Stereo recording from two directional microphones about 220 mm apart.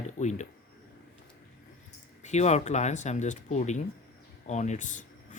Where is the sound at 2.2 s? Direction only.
30° left (ahead or behind).